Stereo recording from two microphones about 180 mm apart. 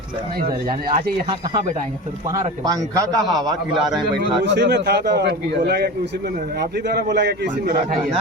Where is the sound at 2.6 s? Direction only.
20° right (ahead or behind).